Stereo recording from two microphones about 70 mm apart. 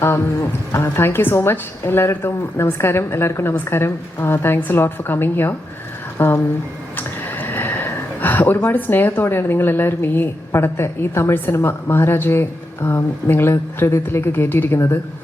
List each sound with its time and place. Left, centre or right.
0.7 s speech: left